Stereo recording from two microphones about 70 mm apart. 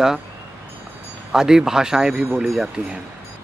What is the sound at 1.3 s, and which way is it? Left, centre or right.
Speech, centre.